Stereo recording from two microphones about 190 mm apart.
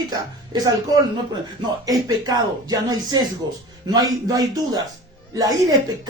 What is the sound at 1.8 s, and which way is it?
Speech, 20° right (ahead or behind).